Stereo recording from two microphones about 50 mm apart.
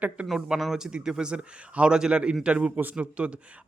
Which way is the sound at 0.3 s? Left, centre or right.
Centre.